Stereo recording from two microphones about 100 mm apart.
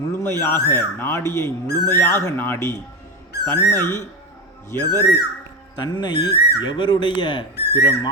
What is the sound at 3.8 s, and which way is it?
Speech, 25° left (ahead or behind).